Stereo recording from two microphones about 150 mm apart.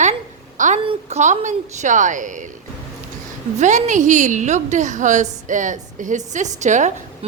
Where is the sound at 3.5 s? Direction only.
55° right (ahead or behind).